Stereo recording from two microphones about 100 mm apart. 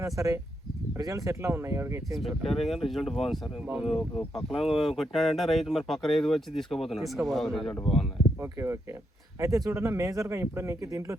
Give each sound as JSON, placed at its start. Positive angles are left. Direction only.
{"t": 0.0, "sound": "speech", "side_deg": -30}
{"t": 2.1, "sound": "speech", "side_deg": 0}
{"t": 8.4, "sound": "speech", "side_deg": -25}